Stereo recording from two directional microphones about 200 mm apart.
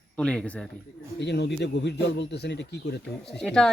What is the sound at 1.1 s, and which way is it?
Speech, 60° left (ahead or behind).